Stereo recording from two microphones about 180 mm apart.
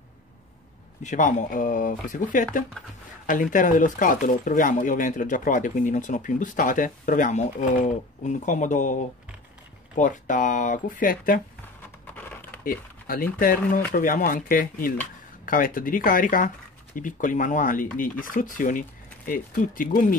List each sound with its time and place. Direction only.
1.0 s speech: 45° left (ahead or behind)
12.2 s a sound: 10° left (ahead or behind)
12.6 s speech: 50° left (ahead or behind)